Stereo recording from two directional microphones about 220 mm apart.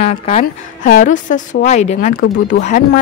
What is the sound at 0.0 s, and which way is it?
A woman's voice, 30° left (ahead or behind).